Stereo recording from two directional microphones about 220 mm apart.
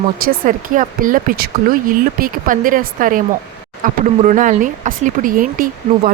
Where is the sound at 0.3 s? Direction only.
35° right (ahead or behind).